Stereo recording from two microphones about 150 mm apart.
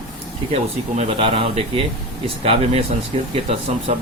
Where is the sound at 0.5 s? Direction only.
40° right (ahead or behind).